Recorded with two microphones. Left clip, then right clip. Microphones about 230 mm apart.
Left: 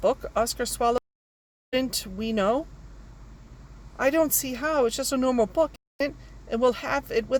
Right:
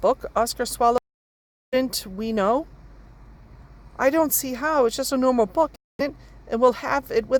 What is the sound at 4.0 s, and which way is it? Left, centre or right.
Speech, right.